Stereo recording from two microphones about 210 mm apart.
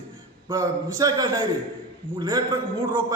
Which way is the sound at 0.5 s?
15° right (ahead or behind).